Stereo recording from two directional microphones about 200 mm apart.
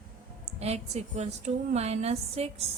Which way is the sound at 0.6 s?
30° right (ahead or behind).